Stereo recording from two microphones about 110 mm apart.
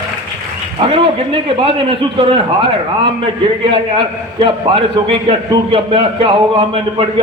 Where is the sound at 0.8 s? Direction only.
55° right (ahead or behind).